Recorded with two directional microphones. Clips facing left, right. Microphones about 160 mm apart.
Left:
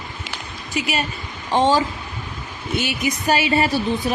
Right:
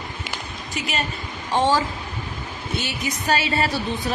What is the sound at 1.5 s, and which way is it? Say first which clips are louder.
Speech: left 3 dB; 20° left (ahead or behind).